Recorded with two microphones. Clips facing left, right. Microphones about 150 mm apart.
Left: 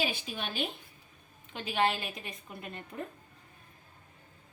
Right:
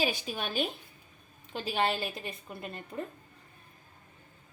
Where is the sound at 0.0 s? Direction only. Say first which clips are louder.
Right 3 dB; 40° right (ahead or behind).